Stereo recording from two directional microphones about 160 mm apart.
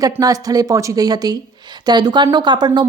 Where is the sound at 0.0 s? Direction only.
25° right (ahead or behind).